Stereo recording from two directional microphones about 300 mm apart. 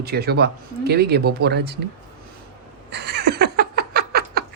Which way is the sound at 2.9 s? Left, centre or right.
Right.